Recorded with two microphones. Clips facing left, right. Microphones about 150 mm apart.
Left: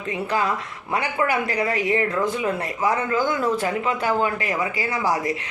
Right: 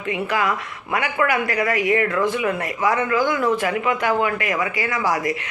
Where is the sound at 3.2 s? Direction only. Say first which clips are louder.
Right 2 dB; 80° right.